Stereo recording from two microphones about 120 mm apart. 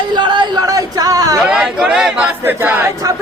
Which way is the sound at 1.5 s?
10° right (ahead or behind).